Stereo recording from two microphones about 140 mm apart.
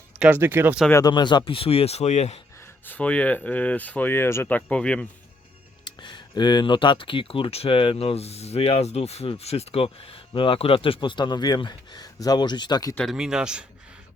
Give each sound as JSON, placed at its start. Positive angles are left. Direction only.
{"t": 0.2, "sound": "speech", "side_deg": -15}
{"t": 1.0, "sound": "speech", "side_deg": 30}
{"t": 2.6, "sound": "speech", "side_deg": 15}
{"t": 5.8, "sound": "speech", "side_deg": 30}
{"t": 13.0, "sound": "speech", "side_deg": 0}